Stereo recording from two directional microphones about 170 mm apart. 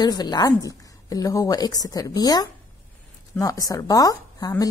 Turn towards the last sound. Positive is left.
turn(degrees=20)  # may be behind; listen again after turning